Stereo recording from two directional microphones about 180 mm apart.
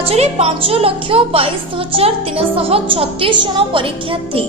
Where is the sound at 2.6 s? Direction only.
30° right (ahead or behind).